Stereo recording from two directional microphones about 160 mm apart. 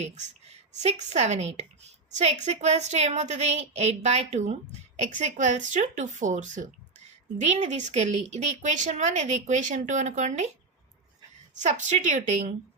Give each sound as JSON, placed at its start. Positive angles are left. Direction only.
{"t": 0.8, "sound": "a woman's voice", "side_deg": -45}
{"t": 11.6, "sound": "a woman's voice", "side_deg": -45}